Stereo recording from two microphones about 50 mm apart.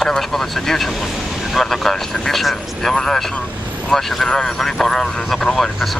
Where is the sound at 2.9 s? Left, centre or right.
Centre.